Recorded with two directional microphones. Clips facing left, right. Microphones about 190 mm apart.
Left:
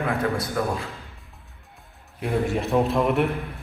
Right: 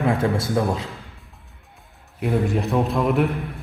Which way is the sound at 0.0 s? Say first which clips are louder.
Right 4 dB; 25° right (ahead or behind).